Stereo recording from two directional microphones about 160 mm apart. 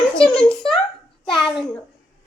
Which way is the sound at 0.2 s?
5° left (ahead or behind).